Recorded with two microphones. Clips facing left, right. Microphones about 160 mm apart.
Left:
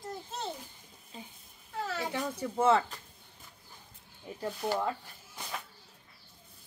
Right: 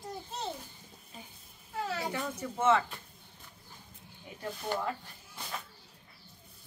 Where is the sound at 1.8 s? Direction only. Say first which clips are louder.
Even; centre (ahead or behind).